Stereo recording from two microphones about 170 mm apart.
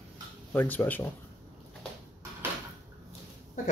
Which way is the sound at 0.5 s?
10° left (ahead or behind).